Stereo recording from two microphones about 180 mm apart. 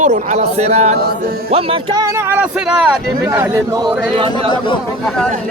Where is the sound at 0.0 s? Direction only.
40° right (ahead or behind); by 3.9 s 20° right (ahead or behind).